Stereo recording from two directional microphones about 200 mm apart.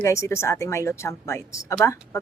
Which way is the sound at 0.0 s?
15° left (ahead or behind).